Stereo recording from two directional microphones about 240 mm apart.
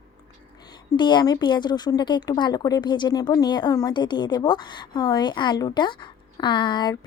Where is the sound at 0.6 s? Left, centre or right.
Centre.